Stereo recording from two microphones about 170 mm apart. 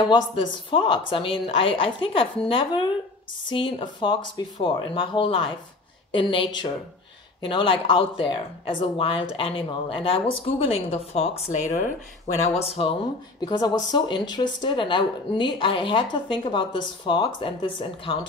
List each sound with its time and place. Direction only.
0.0 s a woman's voice: 25° left (ahead or behind)